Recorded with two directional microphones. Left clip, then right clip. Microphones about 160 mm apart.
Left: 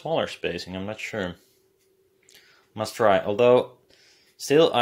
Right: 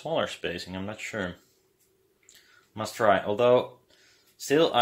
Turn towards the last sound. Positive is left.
turn(degrees=35)  # may be behind; listen again after turning